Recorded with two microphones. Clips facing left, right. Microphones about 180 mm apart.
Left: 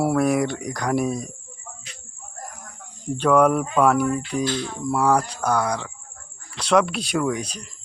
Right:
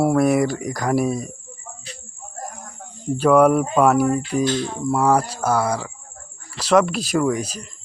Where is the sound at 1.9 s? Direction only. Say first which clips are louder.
Right 7 dB; 35° right (ahead or behind).